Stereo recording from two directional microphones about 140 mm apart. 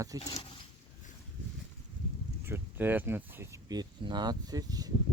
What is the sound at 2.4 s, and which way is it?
Speech, 15° right (ahead or behind).